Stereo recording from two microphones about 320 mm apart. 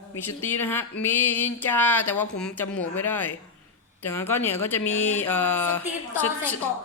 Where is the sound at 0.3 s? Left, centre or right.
Centre.